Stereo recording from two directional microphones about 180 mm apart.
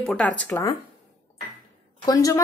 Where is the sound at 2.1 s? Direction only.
20° left (ahead or behind).